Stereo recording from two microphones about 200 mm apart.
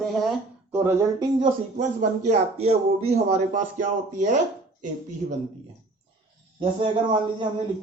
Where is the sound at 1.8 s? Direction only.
35° right (ahead or behind).